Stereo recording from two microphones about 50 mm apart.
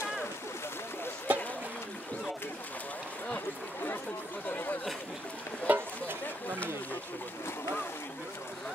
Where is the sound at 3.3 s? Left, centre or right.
Left.